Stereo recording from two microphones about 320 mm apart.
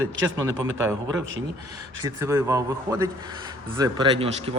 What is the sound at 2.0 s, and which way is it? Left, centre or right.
A man's voice, centre.